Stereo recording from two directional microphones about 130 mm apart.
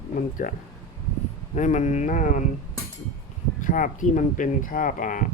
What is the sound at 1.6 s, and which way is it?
Speech, 65° left (ahead or behind).